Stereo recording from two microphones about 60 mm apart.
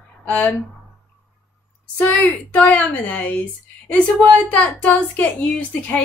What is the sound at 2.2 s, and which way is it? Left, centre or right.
A woman's voice, left.